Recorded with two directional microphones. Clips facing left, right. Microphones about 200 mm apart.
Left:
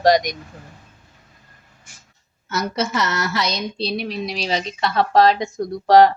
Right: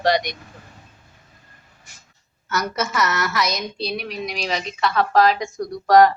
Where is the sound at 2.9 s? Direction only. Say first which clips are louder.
Even; 25° left (ahead or behind).